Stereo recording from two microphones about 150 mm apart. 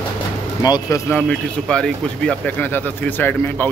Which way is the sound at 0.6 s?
25° left (ahead or behind).